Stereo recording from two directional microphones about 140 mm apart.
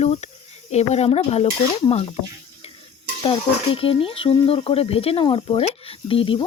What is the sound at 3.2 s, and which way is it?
Speech, 40° left (ahead or behind).